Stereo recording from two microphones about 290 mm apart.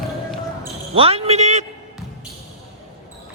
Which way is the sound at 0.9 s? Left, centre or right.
Centre.